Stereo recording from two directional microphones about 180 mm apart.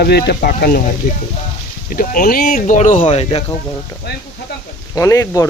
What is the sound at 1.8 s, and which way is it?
Speech, 50° left (ahead or behind).